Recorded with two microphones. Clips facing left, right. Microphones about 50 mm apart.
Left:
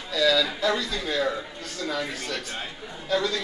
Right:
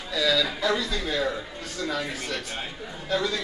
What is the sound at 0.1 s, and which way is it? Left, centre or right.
Speech, centre.